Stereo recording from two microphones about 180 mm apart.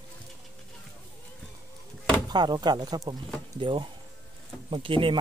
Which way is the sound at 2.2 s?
25° right (ahead or behind).